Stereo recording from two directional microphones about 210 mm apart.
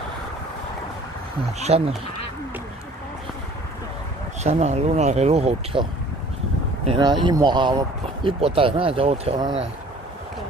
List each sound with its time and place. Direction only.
1.6 s speech: 30° right (ahead or behind)
4.4 s speech: 30° right (ahead or behind)
7.0 s speech: 20° right (ahead or behind)